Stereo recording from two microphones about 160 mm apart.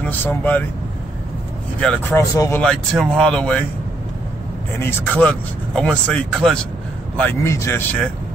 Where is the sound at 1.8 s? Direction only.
5° left (ahead or behind).